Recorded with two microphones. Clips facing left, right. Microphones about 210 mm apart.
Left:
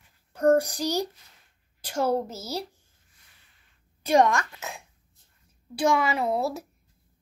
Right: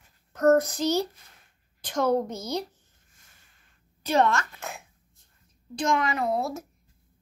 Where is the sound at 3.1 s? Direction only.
45° right (ahead or behind).